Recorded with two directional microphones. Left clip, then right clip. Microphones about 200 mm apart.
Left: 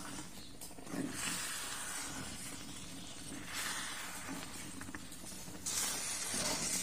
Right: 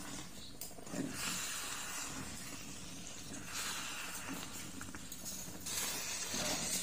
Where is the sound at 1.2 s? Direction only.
25° left (ahead or behind).